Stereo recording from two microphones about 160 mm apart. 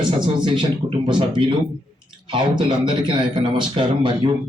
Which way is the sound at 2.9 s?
30° right (ahead or behind).